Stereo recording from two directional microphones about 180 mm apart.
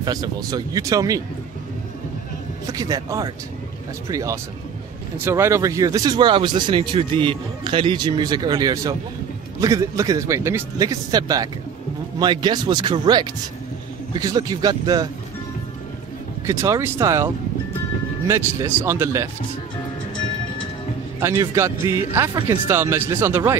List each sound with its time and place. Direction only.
0.0 s speech: 20° right (ahead or behind)
2.6 s speech: 20° right (ahead or behind)
16.4 s speech: 15° right (ahead or behind)
21.2 s speech: 15° right (ahead or behind)